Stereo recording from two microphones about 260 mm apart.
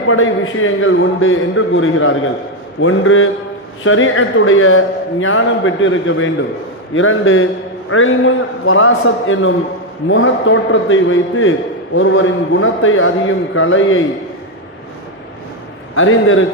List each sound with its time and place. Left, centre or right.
0.1 s a man's voice: left
16.0 s a man's voice: left